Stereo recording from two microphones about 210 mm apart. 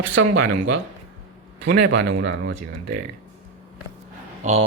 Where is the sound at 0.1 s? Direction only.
60° right (ahead or behind).